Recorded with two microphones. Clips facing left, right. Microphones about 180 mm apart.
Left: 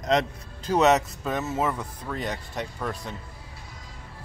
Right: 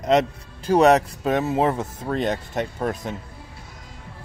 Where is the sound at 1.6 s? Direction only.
45° right (ahead or behind).